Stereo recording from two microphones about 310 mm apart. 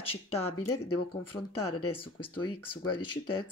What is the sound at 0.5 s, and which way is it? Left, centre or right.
Speech, left.